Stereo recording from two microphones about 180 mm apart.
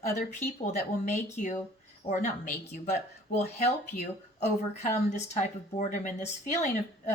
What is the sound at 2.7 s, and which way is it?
Speech, 40° left (ahead or behind).